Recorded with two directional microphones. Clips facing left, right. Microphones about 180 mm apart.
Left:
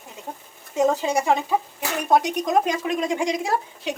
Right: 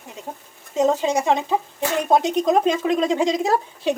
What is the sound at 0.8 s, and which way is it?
Speech, 20° right (ahead or behind).